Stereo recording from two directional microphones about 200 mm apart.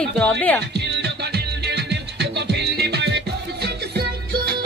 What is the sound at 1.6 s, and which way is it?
Music, 55° right (ahead or behind).